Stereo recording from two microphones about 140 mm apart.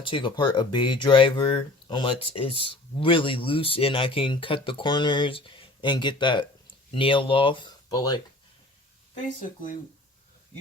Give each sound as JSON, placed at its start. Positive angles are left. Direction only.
{"t": 0.0, "sound": "speech", "side_deg": 35}
{"t": 9.1, "sound": "speech", "side_deg": 65}